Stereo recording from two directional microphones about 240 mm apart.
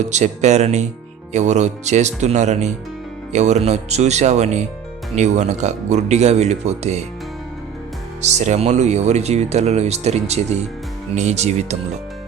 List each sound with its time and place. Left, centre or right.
0.0 s speech: right
8.2 s speech: right